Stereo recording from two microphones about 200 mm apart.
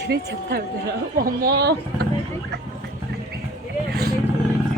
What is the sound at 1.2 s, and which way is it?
Speech, 45° right (ahead or behind).